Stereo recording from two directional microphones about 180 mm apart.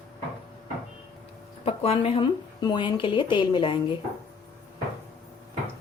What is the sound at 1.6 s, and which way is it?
Speech, 35° left (ahead or behind).